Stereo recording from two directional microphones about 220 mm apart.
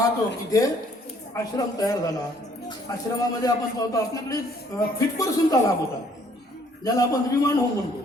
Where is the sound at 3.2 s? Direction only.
15° left (ahead or behind).